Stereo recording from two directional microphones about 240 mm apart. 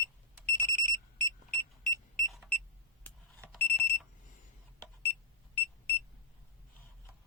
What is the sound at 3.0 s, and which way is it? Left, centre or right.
Alarm clock, centre.